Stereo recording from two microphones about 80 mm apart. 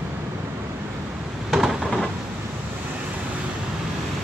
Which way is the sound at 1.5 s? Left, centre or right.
Centre.